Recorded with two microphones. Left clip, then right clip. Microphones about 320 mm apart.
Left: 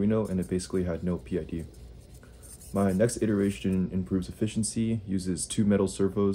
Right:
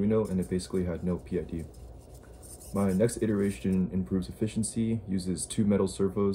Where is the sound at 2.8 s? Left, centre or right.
Centre.